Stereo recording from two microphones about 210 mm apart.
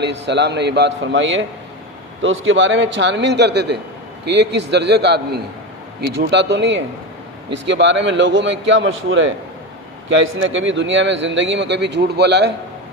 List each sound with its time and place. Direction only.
0.0 s a man's voice: 55° right (ahead or behind)